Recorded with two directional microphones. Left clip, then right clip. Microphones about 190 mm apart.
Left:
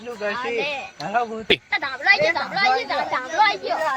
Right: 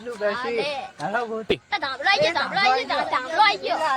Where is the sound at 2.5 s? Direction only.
30° left (ahead or behind).